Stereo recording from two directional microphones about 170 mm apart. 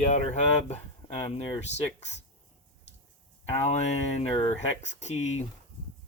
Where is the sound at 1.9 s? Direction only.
40° left (ahead or behind).